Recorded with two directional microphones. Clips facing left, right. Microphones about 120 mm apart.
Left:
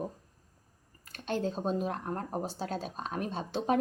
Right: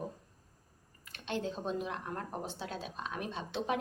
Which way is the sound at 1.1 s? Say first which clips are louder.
Left 4 dB; 40° left (ahead or behind).